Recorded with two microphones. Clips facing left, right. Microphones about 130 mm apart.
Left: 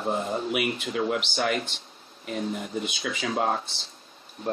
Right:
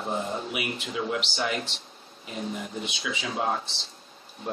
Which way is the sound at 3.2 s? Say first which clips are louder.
Left 3 dB; 55° left (ahead or behind).